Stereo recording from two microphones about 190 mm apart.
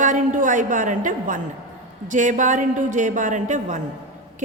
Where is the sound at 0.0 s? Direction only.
40° right (ahead or behind).